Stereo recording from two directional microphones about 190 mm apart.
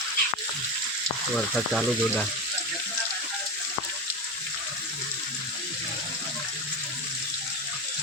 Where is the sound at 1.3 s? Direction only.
Centre (ahead or behind).